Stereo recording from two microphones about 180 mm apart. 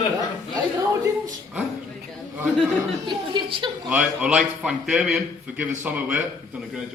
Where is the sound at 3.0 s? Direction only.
25° right (ahead or behind).